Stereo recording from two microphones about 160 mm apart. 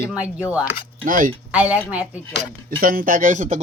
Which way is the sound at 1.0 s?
60° right (ahead or behind).